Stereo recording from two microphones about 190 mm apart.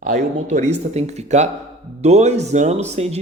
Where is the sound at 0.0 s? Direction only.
40° right (ahead or behind).